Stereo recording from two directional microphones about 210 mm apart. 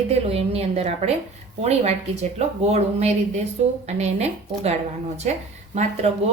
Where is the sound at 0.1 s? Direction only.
30° right (ahead or behind).